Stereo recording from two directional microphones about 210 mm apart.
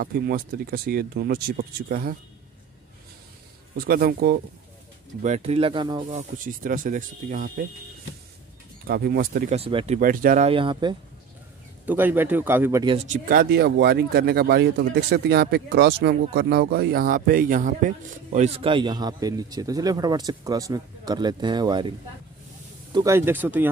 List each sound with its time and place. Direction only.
0.0 s speech: 45° right (ahead or behind)
3.7 s speech: 45° right (ahead or behind)
5.2 s speech: 30° right (ahead or behind)
8.8 s speech: 45° right (ahead or behind)
9.6 s speech: 25° right (ahead or behind)
9.9 s speech: 40° right (ahead or behind); by 11.0 s 20° right (ahead or behind)
11.8 s speech: 10° right (ahead or behind)
12.8 s speech: 30° right (ahead or behind)
13.2 s speech: 45° right (ahead or behind); by 21.9 s 20° right (ahead or behind)
22.9 s speech: 15° right (ahead or behind)